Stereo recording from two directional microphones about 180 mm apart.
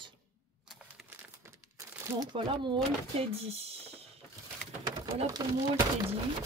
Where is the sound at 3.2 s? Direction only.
30° right (ahead or behind).